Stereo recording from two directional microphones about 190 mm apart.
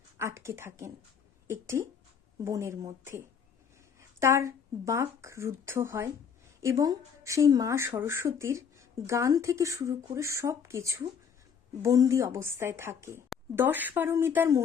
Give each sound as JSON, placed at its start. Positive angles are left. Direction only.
{"t": 0.2, "sound": "speech", "side_deg": -15}